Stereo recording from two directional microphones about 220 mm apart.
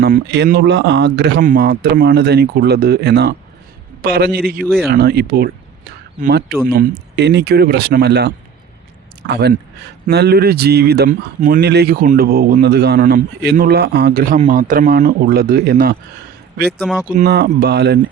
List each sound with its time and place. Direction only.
0.0 s speech: 45° right (ahead or behind)
4.6 s speech: centre (ahead or behind)
4.9 s speech: 45° right (ahead or behind)
16.8 s speech: centre (ahead or behind)
17.1 s speech: 45° right (ahead or behind)